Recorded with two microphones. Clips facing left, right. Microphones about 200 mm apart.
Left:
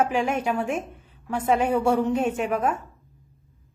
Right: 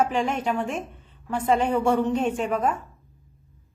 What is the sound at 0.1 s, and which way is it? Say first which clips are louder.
A woman's voice: left 1 dB; 10° left (ahead or behind).